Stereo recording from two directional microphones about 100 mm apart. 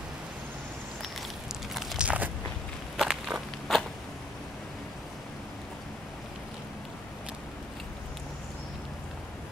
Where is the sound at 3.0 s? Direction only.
5° right (ahead or behind).